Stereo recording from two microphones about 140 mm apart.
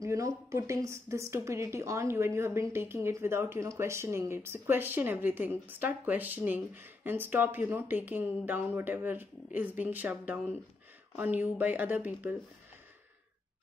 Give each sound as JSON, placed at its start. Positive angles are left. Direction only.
{"t": 0.0, "sound": "a woman's voice", "side_deg": -20}